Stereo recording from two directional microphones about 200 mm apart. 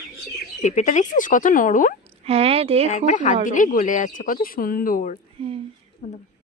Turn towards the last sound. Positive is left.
turn(degrees=35)  # may be behind; listen again after turning